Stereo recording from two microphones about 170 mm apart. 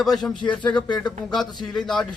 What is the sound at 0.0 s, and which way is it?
A man's voice, centre (ahead or behind).